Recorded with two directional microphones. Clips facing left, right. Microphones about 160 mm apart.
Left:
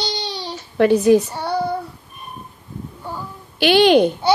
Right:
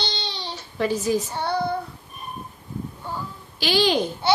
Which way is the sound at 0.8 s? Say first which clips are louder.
Left 10 dB; 65° left (ahead or behind).